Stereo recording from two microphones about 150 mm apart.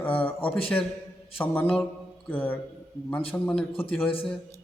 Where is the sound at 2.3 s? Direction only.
15° left (ahead or behind).